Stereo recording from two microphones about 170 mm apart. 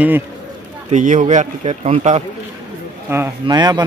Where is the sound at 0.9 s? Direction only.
50° right (ahead or behind).